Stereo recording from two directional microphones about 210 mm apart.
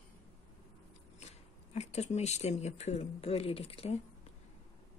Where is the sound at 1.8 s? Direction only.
30° left (ahead or behind).